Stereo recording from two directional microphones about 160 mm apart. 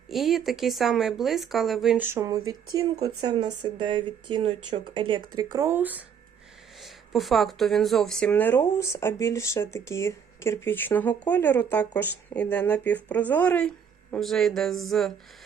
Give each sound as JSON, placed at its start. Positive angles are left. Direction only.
{"t": 0.1, "sound": "speech", "side_deg": 0}
{"t": 2.0, "sound": "speech", "side_deg": -20}